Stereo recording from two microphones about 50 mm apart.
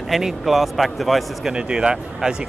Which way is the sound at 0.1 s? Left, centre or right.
Centre.